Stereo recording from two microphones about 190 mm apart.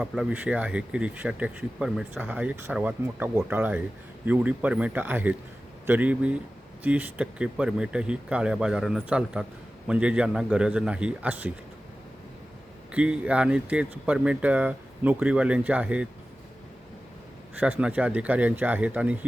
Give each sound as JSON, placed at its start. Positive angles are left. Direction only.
{"t": 0.0, "sound": "speech", "side_deg": -5}
{"t": 12.9, "sound": "speech", "side_deg": -5}
{"t": 17.6, "sound": "speech", "side_deg": -5}